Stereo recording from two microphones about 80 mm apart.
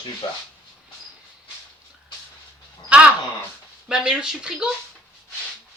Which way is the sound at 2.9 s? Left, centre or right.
Centre.